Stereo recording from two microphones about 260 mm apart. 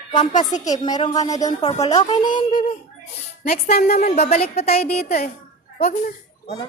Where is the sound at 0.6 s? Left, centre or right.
Centre; by 5.3 s left.